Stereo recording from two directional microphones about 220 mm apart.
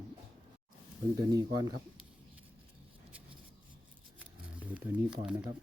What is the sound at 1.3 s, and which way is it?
Speech, 15° right (ahead or behind).